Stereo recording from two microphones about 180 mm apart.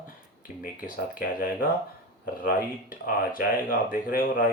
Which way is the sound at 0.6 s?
50° left (ahead or behind).